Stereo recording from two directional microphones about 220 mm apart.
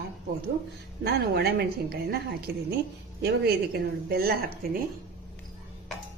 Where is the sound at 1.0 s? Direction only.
45° right (ahead or behind).